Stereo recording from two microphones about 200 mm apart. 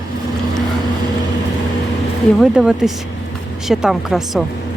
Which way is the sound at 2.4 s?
Centre (ahead or behind).